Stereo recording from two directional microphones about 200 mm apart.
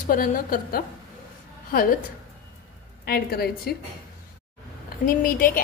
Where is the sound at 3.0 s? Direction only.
50° left (ahead or behind).